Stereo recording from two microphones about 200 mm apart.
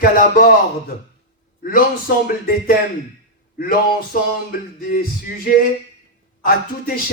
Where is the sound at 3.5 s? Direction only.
45° left (ahead or behind).